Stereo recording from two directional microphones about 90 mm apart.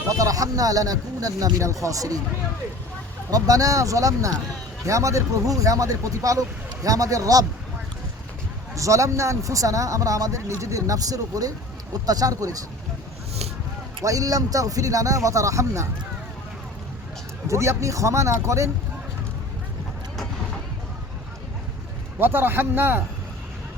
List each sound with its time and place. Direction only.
0.1 s speech: 40° right (ahead or behind)
3.2 s speech: 45° right (ahead or behind)
8.7 s speech: 35° right (ahead or behind)
14.0 s speech: 40° right (ahead or behind)
17.5 s speech: 35° right (ahead or behind)
22.2 s speech: 25° right (ahead or behind)